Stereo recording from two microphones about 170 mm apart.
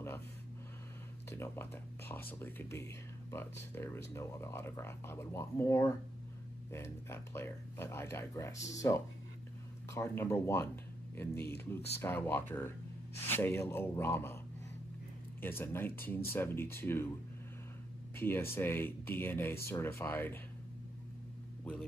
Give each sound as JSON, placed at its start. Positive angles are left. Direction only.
{"t": 1.3, "sound": "speech", "side_deg": 15}
{"t": 15.4, "sound": "speech", "side_deg": 15}
{"t": 18.1, "sound": "speech", "side_deg": 15}